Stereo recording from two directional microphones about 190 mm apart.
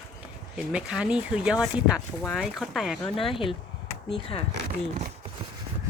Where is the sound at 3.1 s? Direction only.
30° left (ahead or behind).